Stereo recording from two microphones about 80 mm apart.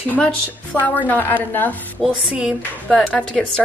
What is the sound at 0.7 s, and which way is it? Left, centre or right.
Speech, centre.